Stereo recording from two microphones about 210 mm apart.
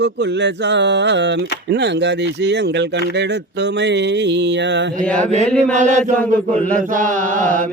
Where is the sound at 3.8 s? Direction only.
55° right (ahead or behind).